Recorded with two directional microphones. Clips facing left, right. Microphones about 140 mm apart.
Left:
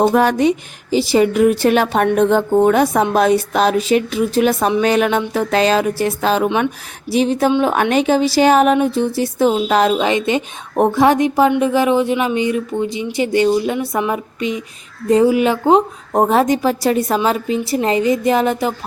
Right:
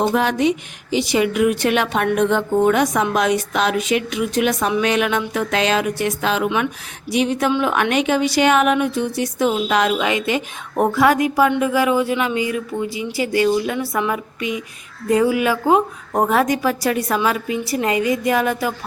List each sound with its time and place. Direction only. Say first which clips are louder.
0.0 s speech: left 4 dB; 45° left (ahead or behind); by 18.7 s 25° left (ahead or behind)